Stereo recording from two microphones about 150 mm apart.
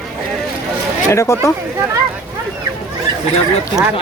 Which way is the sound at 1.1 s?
20° left (ahead or behind).